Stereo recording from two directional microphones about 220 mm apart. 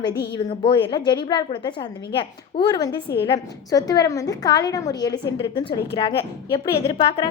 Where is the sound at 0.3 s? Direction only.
20° left (ahead or behind).